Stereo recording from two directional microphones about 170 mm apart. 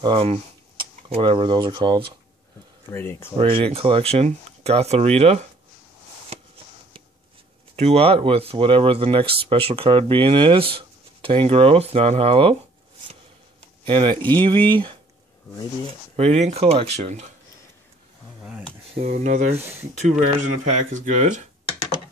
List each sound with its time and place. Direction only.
0.0 s speech: 35° right (ahead or behind)
2.9 s speech: 15° left (ahead or behind)
3.3 s speech: 35° right (ahead or behind)
7.7 s speech: 35° right (ahead or behind)
13.8 s speech: 30° right (ahead or behind)
16.2 s speech: 40° right (ahead or behind)
19.1 s speech: 45° right (ahead or behind)